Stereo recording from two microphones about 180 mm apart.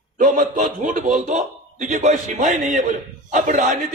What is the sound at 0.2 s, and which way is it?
A man's voice, 45° right (ahead or behind).